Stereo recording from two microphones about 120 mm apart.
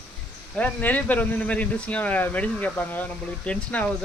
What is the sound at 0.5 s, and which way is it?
Speech, 15° left (ahead or behind).